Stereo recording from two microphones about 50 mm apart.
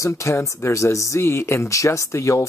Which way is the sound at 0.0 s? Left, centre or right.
Left.